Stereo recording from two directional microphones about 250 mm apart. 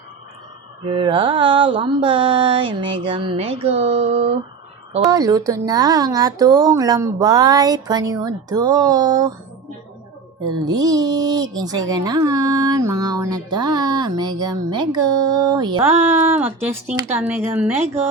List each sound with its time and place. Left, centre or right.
0.9 s mantra: centre
5.1 s speech: centre
10.6 s speech: centre